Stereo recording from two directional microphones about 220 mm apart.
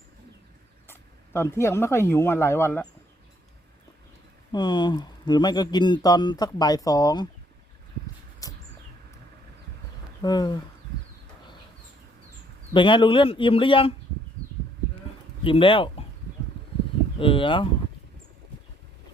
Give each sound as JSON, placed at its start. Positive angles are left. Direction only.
{"t": 0.9, "sound": "speech", "side_deg": 10}
{"t": 4.5, "sound": "speech", "side_deg": 20}
{"t": 8.4, "sound": "a sound", "side_deg": 15}
{"t": 10.2, "sound": "speech", "side_deg": 20}
{"t": 12.7, "sound": "speech", "side_deg": 20}
{"t": 15.4, "sound": "speech", "side_deg": 25}
{"t": 17.2, "sound": "speech", "side_deg": 25}